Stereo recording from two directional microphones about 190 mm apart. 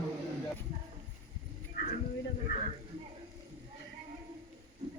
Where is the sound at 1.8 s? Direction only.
55° left (ahead or behind).